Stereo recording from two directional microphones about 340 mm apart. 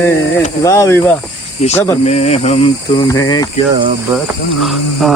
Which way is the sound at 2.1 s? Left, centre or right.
Centre.